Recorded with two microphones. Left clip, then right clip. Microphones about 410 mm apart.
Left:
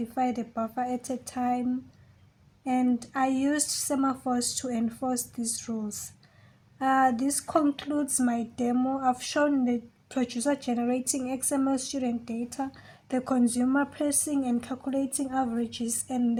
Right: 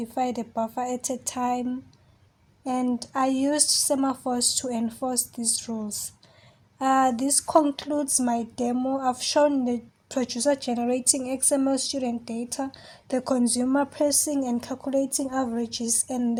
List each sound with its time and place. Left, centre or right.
0.1 s speech: right
2.6 s speech: right